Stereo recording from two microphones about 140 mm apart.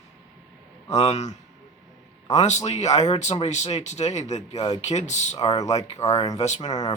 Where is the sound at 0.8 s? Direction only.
50° left (ahead or behind).